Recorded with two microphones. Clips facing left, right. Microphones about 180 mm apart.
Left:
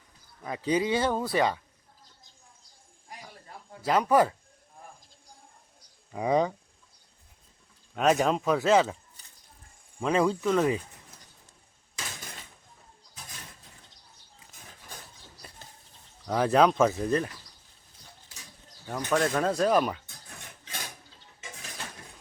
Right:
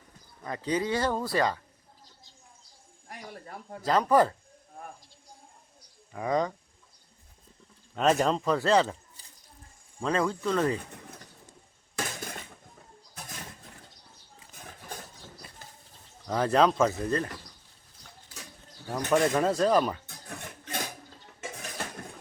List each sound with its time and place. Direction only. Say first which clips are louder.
0.4 s speech: left 2 dB; 10° left (ahead or behind)
3.1 s a sound: right 4 dB; 55° right (ahead or behind)
3.8 s speech: even; 10° left (ahead or behind)
6.1 s speech: left 3 dB; 15° left (ahead or behind)
7.9 s speech: left 1 dB; centre (ahead or behind)
10.0 s speech: left 3 dB; 15° left (ahead or behind)
11.9 s a sound: right 7 dB; 50° right (ahead or behind)
16.2 s speech: left 1 dB; 5° left (ahead or behind)
18.9 s speech: right 2 dB; 10° right (ahead or behind)
20.1 s music: right 7 dB; 55° right (ahead or behind)